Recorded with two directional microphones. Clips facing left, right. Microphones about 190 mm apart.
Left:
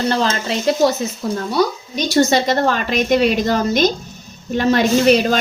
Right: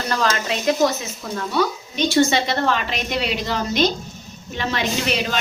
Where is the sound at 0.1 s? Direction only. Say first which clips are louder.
Left 3 dB; 30° left (ahead or behind).